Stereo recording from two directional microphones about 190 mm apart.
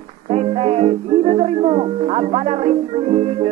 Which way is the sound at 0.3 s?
30° right (ahead or behind).